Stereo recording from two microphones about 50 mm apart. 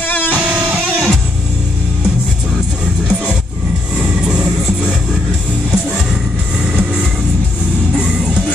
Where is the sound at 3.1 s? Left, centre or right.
Centre.